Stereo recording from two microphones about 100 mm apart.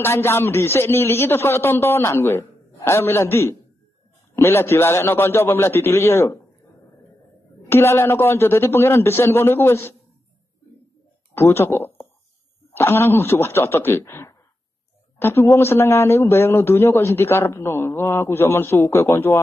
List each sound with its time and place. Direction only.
0.0 s a man's voice: 25° left (ahead or behind)
7.7 s a man's voice: 25° left (ahead or behind)
11.3 s a man's voice: 25° left (ahead or behind)